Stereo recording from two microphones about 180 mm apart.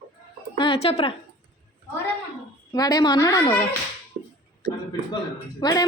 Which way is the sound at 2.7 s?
20° left (ahead or behind).